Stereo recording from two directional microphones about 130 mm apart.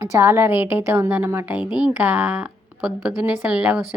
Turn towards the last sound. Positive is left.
turn(degrees=-10)  # may be behind; listen again after turning